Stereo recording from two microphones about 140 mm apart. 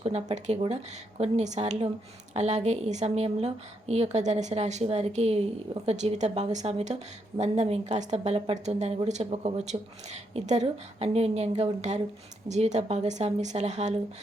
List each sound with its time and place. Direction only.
0.0 s speech: 55° right (ahead or behind)